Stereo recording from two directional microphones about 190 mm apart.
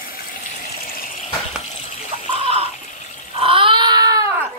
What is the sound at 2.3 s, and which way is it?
Chicken, 30° right (ahead or behind).